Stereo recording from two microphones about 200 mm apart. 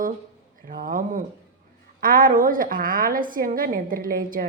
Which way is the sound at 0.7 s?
45° right (ahead or behind).